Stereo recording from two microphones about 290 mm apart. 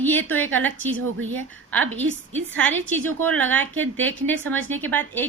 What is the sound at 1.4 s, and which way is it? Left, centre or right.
A woman's voice, centre.